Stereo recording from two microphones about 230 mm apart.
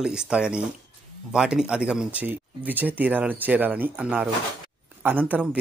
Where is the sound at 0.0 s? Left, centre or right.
Centre.